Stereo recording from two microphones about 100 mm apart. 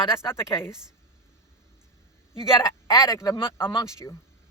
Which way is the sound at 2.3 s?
35° left (ahead or behind).